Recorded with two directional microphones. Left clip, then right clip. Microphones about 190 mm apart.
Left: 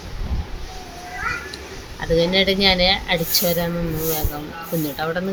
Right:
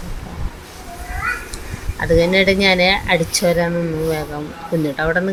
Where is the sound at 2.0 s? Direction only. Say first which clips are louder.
Right 4 dB; 20° right (ahead or behind).